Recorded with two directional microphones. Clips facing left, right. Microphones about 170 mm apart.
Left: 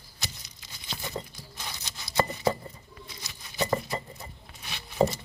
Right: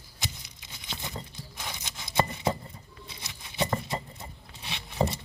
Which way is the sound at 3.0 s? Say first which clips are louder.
Right 1 dB; 25° right (ahead or behind).